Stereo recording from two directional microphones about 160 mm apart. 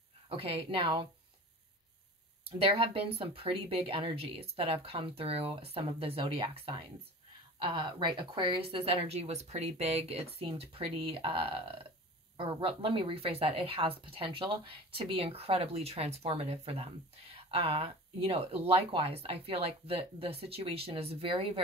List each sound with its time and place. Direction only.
0.3 s a woman's voice: 35° right (ahead or behind)
2.6 s a woman's voice: 35° right (ahead or behind)